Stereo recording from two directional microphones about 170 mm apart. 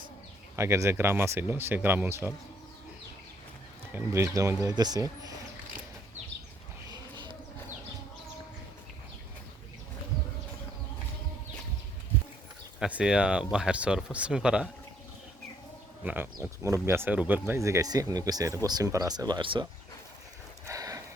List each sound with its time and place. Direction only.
0.5 s speech: 15° right (ahead or behind)
3.9 s speech: 15° right (ahead or behind)
6.9 s a sound: 25° right (ahead or behind)
12.8 s speech: 5° right (ahead or behind)
16.0 s speech: 10° right (ahead or behind); by 19.6 s 30° right (ahead or behind)
20.7 s horse: 20° right (ahead or behind)